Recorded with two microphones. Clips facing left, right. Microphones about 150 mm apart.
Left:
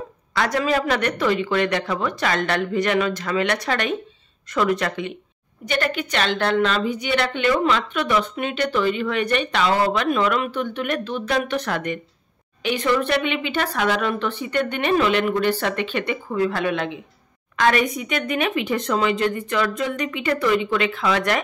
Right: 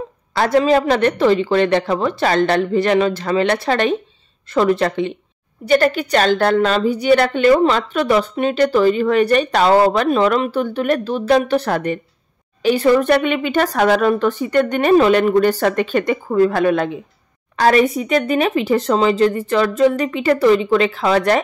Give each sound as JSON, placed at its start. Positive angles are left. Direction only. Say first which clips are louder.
{"t": 0.3, "sound": "a woman's voice", "louder": "right 7 dB", "side_deg": -30}